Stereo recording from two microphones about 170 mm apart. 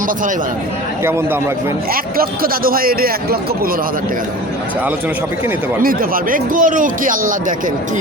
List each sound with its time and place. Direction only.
1.9 s a man's voice: 60° right (ahead or behind)
5.8 s speech: 55° right (ahead or behind)